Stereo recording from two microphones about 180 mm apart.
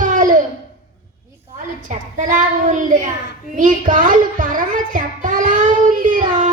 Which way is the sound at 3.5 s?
45° right (ahead or behind).